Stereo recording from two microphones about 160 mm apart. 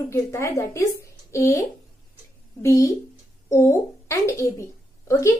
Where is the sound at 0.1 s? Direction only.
15° left (ahead or behind).